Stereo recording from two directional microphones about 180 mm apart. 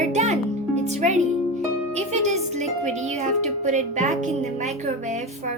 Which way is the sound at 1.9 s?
40° right (ahead or behind).